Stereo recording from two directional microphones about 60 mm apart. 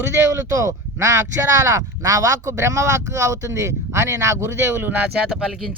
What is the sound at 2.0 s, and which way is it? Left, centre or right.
Speech, right.